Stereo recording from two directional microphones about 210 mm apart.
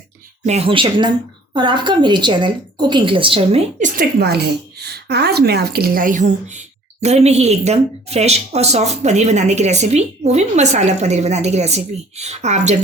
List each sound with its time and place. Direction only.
0.4 s a woman's voice: 30° right (ahead or behind)